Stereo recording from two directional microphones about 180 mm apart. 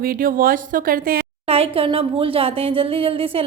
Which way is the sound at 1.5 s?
35° right (ahead or behind).